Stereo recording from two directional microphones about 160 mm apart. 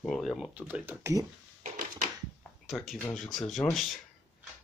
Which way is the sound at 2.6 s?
Centre (ahead or behind).